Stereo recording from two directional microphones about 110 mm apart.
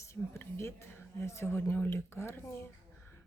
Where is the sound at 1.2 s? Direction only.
25° left (ahead or behind).